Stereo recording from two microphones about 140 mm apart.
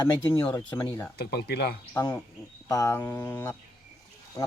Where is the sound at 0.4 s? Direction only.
25° left (ahead or behind).